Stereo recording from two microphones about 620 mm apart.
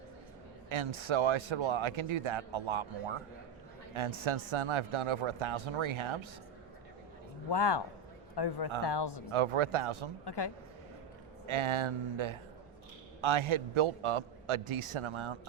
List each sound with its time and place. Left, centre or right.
0.7 s a man's voice: right
7.5 s a man's voice: left
9.3 s a man's voice: right
10.2 s a man's voice: left
11.4 s a man's voice: right